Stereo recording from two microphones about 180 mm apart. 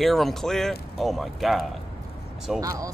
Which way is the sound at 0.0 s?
Centre (ahead or behind).